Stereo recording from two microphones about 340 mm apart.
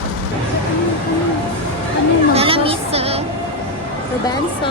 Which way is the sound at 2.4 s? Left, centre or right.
Centre.